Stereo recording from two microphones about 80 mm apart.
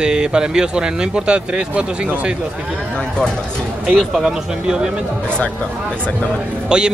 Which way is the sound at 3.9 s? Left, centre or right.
Centre.